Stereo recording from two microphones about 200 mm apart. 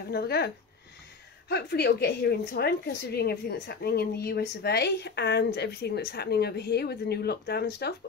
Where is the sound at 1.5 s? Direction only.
55° left (ahead or behind).